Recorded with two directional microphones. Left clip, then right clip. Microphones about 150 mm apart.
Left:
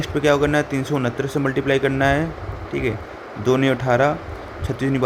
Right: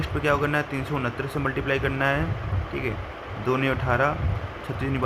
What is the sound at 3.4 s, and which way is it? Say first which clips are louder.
Speech: left 6 dB; 30° left (ahead or behind).